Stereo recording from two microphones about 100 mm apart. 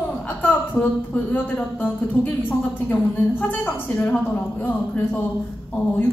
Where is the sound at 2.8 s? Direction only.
15° left (ahead or behind).